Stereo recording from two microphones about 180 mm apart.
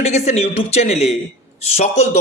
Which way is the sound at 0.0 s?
35° left (ahead or behind).